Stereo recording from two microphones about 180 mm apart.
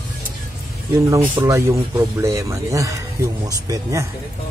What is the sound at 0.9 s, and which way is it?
Speech, 15° right (ahead or behind).